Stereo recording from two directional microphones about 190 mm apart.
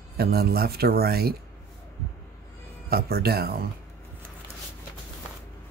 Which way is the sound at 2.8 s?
55° right (ahead or behind).